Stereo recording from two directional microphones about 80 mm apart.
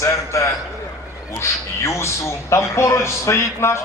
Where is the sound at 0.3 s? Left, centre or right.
Left.